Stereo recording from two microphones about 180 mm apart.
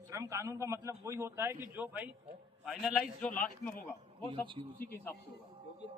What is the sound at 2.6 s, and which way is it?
A man's voice, centre (ahead or behind).